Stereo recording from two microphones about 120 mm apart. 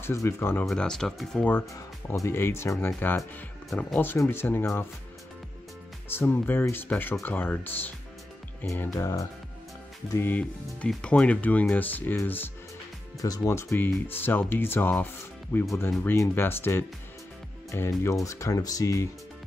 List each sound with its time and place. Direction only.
0.0 s speech: 25° left (ahead or behind)
0.7 s speech: 5° left (ahead or behind)
2.0 s speech: 20° left (ahead or behind)
6.0 s speech: 20° left (ahead or behind)
10.1 s speech: 15° left (ahead or behind)
13.2 s speech: 30° left (ahead or behind)